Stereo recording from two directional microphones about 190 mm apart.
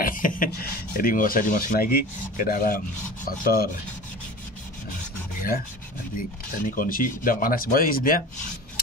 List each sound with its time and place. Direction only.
0.0 s speech: 45° left (ahead or behind)
6.1 s speech: 45° left (ahead or behind)